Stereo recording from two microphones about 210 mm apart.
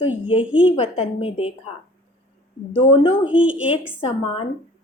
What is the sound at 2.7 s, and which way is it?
Speech, 25° left (ahead or behind).